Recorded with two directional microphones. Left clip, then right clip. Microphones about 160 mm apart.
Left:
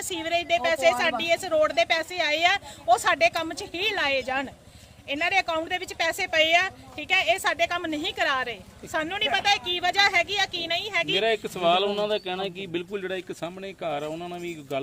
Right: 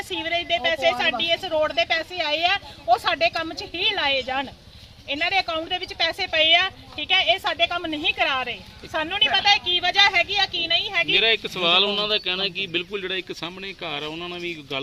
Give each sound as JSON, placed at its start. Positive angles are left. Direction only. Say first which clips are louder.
{"t": 0.1, "sound": "a woman's voice", "louder": "right 1 dB", "side_deg": 30}
{"t": 11.1, "sound": "speech", "louder": "right 7 dB", "side_deg": 90}